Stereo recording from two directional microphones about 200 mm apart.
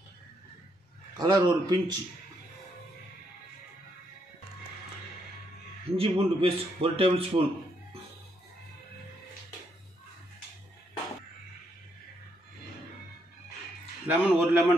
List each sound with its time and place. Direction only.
1.1 s a man's voice: 20° right (ahead or behind)
5.9 s a man's voice: 30° right (ahead or behind)
14.0 s a man's voice: 10° right (ahead or behind)